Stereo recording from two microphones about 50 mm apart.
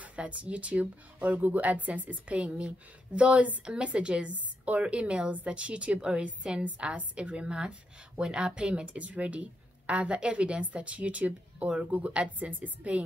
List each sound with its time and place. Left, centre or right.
0.0 s a woman's voice: right